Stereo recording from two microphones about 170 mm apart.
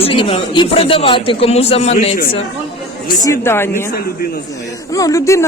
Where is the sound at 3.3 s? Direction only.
15° left (ahead or behind).